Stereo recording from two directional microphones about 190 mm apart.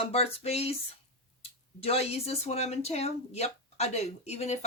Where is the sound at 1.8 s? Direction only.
30° left (ahead or behind).